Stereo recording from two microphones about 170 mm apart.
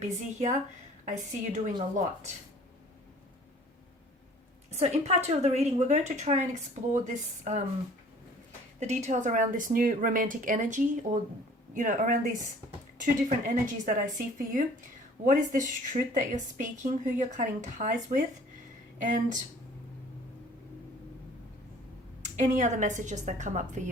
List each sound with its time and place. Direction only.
0.0 s a woman's voice: 45° right (ahead or behind)
4.7 s a woman's voice: 40° right (ahead or behind)
8.8 s a woman's voice: 40° right (ahead or behind)
22.4 s a woman's voice: 45° right (ahead or behind)